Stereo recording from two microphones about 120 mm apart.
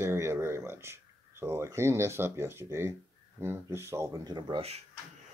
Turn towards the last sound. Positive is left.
turn(degrees=-55)  # may be behind; listen again after turning